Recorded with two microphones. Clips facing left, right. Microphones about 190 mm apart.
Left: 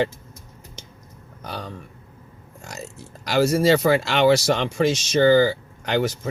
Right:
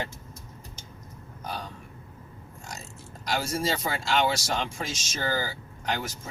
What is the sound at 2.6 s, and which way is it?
Speech, 65° left (ahead or behind).